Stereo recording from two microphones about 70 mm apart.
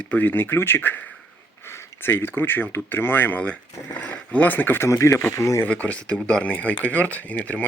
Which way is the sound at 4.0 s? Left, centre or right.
Centre.